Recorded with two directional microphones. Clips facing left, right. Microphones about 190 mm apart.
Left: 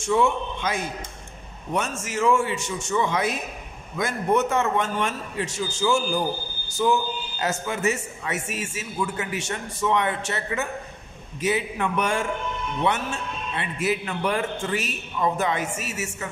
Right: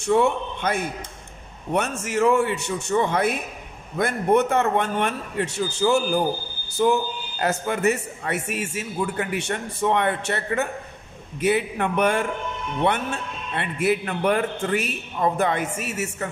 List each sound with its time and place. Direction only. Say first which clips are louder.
0.0 s a man's voice: right 2 dB; 60° right (ahead or behind)